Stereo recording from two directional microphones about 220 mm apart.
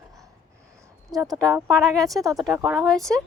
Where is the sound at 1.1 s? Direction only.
15° right (ahead or behind).